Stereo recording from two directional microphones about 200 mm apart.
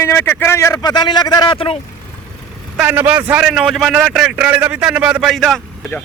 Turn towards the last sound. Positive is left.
turn(degrees=0)  # may be behind; listen again after turning